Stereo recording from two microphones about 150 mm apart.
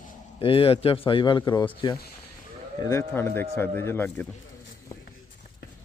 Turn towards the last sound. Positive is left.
turn(degrees=15)  # may be behind; listen again after turning